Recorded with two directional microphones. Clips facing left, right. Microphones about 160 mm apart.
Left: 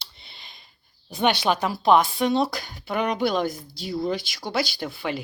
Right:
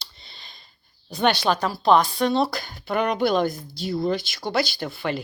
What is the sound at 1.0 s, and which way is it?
Speech, 5° left (ahead or behind).